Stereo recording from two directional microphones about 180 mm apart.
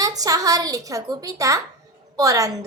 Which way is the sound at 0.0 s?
20° right (ahead or behind).